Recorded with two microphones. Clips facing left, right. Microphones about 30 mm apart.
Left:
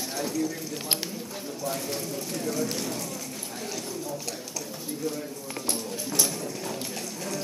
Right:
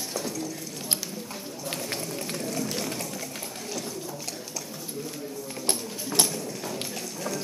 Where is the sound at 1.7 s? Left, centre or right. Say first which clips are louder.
Even; right.